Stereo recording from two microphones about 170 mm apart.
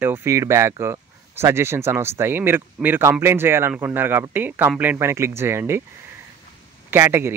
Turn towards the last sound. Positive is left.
turn(degrees=-15)  # may be behind; listen again after turning